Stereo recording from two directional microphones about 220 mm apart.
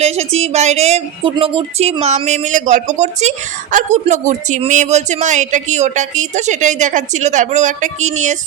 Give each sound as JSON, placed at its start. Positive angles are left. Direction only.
{"t": 0.0, "sound": "a woman's voice", "side_deg": -30}